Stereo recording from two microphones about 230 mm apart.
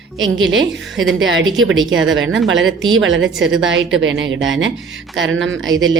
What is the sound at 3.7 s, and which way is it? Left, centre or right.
A woman's voice, right.